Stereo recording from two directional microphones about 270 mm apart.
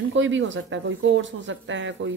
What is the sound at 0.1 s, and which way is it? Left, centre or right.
Speech, right.